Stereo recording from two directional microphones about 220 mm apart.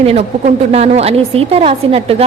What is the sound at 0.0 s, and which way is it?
A woman's voice, 30° right (ahead or behind).